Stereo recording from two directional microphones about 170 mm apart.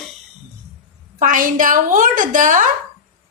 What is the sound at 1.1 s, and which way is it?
A woman's voice, 50° right (ahead or behind).